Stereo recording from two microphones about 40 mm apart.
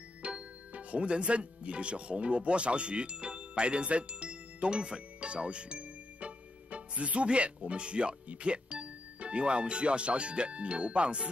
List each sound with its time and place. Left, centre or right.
0.2 s speech: right